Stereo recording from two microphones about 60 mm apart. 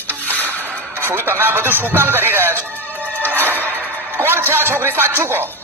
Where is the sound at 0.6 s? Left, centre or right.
Right.